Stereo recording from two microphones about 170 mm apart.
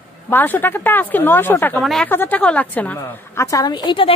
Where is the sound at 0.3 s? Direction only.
10° left (ahead or behind).